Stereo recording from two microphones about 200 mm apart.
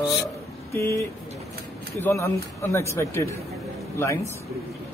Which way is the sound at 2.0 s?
15° left (ahead or behind).